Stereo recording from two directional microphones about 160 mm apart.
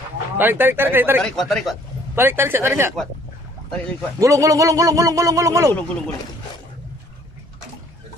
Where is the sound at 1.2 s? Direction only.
Centre (ahead or behind).